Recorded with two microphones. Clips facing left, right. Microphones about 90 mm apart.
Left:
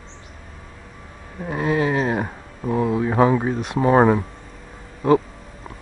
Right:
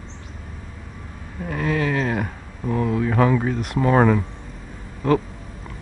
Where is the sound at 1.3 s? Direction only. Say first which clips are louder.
Left 2 dB; 20° left (ahead or behind).